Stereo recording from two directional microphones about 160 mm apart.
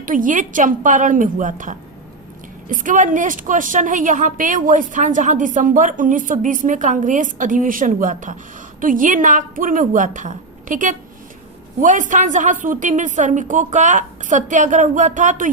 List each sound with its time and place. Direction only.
0.0 s a woman's voice: 55° right (ahead or behind)